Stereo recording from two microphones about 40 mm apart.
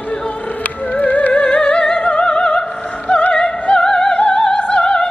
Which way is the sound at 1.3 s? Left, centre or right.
Left.